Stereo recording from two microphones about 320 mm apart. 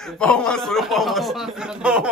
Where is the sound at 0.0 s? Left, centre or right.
Centre.